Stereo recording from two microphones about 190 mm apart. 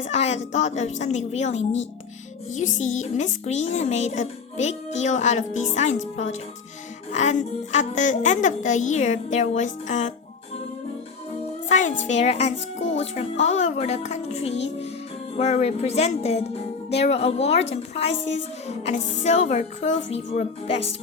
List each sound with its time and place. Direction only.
0.0 s a woman's voice: 35° left (ahead or behind)
11.7 s a woman's voice: 40° left (ahead or behind)